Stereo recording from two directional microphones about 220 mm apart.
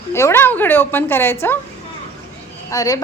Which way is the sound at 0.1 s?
10° left (ahead or behind).